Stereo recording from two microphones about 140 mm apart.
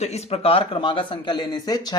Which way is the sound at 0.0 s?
50° left (ahead or behind).